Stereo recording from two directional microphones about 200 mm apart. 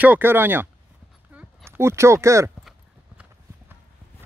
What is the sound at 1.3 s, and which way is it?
Clip-clop, 10° right (ahead or behind).